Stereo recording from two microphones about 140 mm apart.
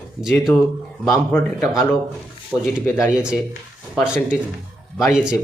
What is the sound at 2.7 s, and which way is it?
Speech, 5° right (ahead or behind).